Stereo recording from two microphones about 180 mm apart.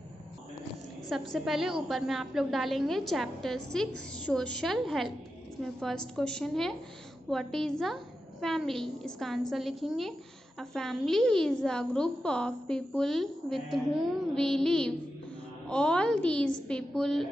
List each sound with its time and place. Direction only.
1.0 s a woman's voice: centre (ahead or behind)